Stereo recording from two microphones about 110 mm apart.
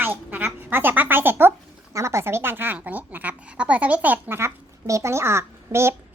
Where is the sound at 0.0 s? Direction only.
15° right (ahead or behind).